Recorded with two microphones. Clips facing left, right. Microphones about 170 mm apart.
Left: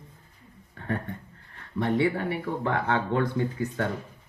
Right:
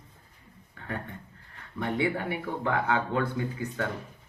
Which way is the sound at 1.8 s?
35° left (ahead or behind).